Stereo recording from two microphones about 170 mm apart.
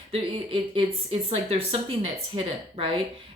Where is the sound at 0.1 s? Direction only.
30° right (ahead or behind).